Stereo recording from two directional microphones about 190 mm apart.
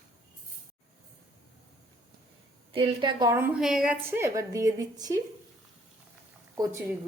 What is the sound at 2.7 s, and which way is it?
Speech, 25° right (ahead or behind).